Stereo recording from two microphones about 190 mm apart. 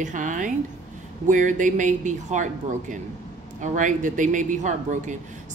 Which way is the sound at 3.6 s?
40° right (ahead or behind).